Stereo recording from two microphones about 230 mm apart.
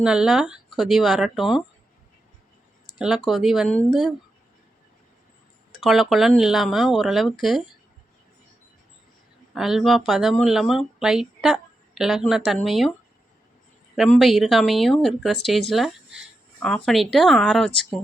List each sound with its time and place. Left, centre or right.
0.0 s speech: centre
2.9 s a sound: centre
3.2 s speech: centre
5.8 s speech: centre
9.6 s speech: centre
13.9 s speech: centre